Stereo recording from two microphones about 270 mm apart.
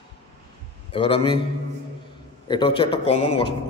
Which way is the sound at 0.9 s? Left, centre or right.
Centre.